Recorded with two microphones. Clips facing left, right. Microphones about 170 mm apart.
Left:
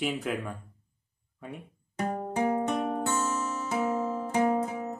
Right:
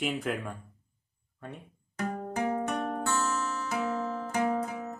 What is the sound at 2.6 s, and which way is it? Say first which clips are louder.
Music: left 2 dB; 15° left (ahead or behind).